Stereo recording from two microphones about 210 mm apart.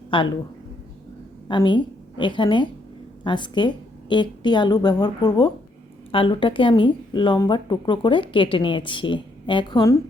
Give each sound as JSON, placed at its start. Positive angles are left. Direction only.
{"t": 0.1, "sound": "a woman's voice", "side_deg": 25}
{"t": 1.5, "sound": "a woman's voice", "side_deg": 20}